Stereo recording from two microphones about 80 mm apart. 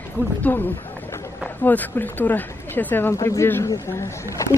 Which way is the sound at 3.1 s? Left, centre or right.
Left.